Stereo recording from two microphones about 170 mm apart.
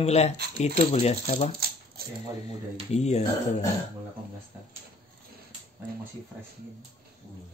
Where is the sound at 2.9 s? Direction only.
40° left (ahead or behind).